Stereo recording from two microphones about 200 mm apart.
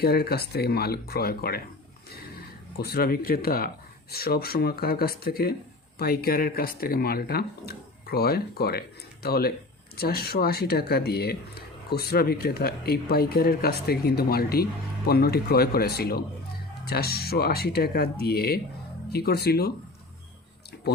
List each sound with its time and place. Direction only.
0.0 s speech: 50° left (ahead or behind)